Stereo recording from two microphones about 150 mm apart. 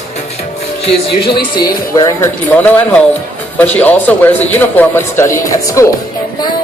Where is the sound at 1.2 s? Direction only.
30° left (ahead or behind).